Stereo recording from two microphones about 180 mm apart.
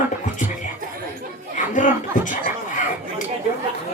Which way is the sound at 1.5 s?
45° left (ahead or behind).